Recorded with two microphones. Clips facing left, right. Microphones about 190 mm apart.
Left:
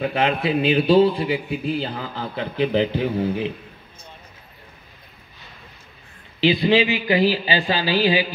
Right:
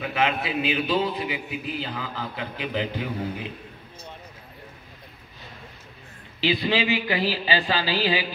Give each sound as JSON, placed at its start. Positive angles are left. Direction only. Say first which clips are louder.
{"t": 0.0, "sound": "a man's voice", "louder": "left 4 dB", "side_deg": 35}
{"t": 6.4, "sound": "speech", "louder": "left 6 dB", "side_deg": 20}